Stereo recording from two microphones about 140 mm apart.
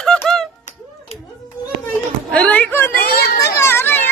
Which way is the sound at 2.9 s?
90° left.